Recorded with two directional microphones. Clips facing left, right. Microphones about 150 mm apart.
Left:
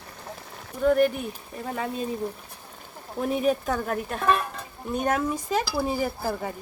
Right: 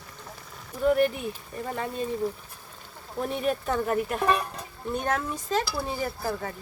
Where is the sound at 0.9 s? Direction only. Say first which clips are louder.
Left 2 dB; centre (ahead or behind).